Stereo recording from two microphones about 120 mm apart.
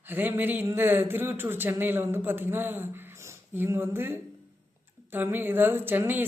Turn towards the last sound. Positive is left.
turn(degrees=-15)  # may be behind; listen again after turning